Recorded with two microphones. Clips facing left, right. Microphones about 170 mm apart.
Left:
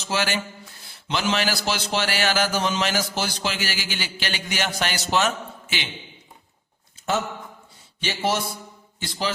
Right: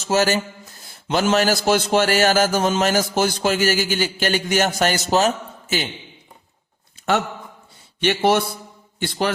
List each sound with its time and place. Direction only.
0.0 s a man's voice: 45° right (ahead or behind)
8.0 s a man's voice: 60° right (ahead or behind)